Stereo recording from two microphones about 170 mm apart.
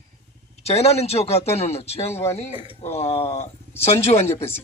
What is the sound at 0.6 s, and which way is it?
A man's voice, 35° left (ahead or behind).